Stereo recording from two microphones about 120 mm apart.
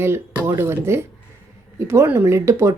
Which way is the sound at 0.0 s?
20° right (ahead or behind).